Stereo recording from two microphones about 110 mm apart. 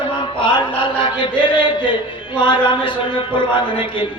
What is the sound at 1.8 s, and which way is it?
A man's voice, 45° left (ahead or behind).